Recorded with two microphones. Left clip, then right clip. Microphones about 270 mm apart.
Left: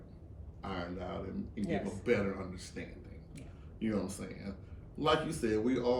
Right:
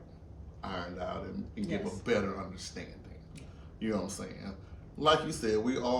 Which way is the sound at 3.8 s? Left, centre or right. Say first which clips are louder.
Right 2 dB; centre.